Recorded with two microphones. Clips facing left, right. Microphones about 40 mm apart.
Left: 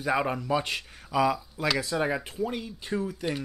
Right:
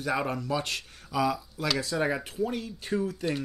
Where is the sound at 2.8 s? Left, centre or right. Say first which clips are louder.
Right 2 dB; centre.